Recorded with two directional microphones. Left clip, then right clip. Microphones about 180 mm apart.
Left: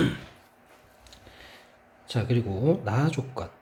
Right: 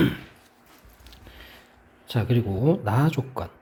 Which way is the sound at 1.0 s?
25° right (ahead or behind).